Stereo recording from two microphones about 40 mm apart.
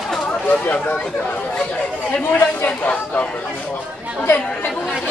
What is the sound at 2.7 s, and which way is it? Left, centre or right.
Chatter, left.